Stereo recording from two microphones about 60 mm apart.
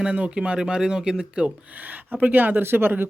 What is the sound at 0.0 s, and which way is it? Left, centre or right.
Speech, centre.